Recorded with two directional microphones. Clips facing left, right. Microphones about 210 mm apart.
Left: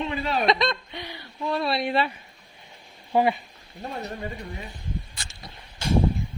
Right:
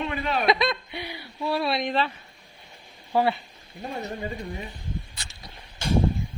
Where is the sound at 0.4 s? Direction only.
5° right (ahead or behind); by 3.3 s 15° left (ahead or behind).